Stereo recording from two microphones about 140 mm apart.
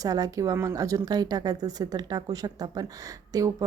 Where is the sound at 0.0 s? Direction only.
25° right (ahead or behind).